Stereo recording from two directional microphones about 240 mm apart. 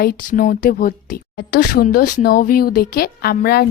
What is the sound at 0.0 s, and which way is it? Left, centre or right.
Speech, left.